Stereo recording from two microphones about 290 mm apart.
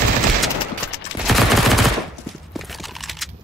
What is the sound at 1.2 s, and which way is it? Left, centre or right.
Fusillade, centre.